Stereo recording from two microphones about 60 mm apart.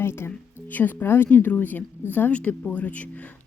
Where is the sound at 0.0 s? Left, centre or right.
Left.